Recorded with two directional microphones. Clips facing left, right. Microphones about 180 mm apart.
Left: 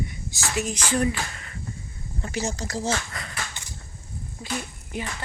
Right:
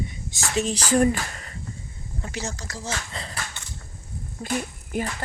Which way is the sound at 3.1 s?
30° right (ahead or behind).